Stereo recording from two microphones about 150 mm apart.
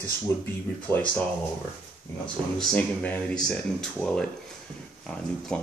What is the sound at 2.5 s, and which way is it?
Speech, 10° left (ahead or behind).